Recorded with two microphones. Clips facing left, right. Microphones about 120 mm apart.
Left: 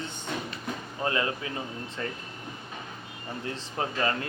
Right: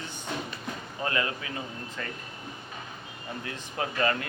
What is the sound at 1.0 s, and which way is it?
Speech, 25° left (ahead or behind).